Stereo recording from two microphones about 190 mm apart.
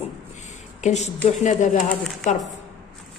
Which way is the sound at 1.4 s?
40° left (ahead or behind).